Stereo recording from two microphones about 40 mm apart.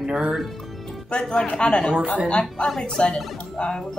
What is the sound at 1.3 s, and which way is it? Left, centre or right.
Speech, centre.